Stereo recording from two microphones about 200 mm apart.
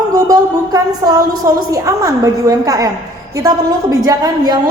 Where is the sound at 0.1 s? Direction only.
20° right (ahead or behind).